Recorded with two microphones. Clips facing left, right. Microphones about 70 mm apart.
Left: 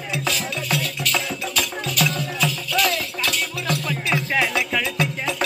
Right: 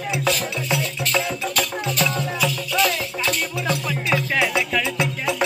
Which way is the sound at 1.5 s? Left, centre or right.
Right.